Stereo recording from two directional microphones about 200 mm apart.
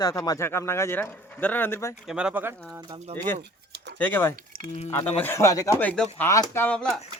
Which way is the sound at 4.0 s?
10° left (ahead or behind).